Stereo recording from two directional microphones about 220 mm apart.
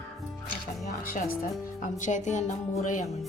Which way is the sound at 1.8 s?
35° left (ahead or behind).